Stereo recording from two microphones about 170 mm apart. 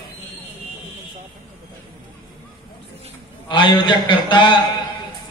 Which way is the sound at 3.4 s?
30° left (ahead or behind).